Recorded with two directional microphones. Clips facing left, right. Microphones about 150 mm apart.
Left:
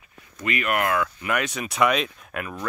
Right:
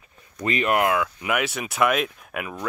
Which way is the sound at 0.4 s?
30° right (ahead or behind).